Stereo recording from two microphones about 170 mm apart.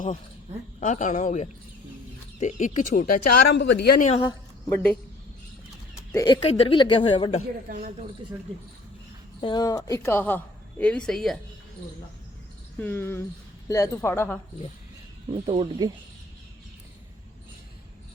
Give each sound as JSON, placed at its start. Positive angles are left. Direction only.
{"t": 0.8, "sound": "speech", "side_deg": 45}
{"t": 4.2, "sound": "a sound", "side_deg": 25}
{"t": 6.2, "sound": "speech", "side_deg": 30}
{"t": 7.7, "sound": "speech", "side_deg": -55}
{"t": 9.4, "sound": "speech", "side_deg": 25}
{"t": 12.8, "sound": "speech", "side_deg": 10}
{"t": 15.3, "sound": "speech", "side_deg": -30}